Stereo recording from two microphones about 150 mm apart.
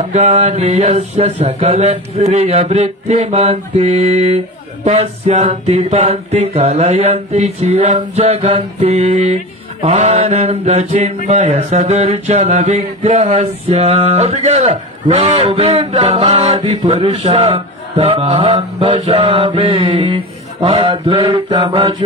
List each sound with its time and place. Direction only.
0.1 s music: 45° right (ahead or behind)